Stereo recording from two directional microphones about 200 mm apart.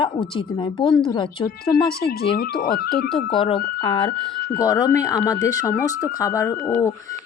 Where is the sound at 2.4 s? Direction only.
50° left (ahead or behind).